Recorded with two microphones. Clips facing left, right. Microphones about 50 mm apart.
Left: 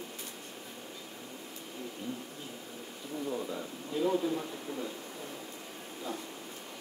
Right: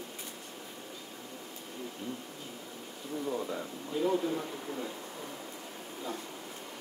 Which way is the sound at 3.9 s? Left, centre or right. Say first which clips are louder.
Even; centre.